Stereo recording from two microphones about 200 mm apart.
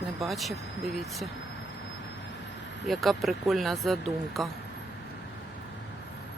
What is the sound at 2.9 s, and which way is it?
Speech, centre (ahead or behind).